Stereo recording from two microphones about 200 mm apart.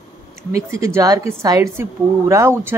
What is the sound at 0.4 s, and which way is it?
A woman's voice, 15° right (ahead or behind).